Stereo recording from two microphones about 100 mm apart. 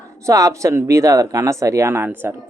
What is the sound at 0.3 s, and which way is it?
Speech, 35° right (ahead or behind).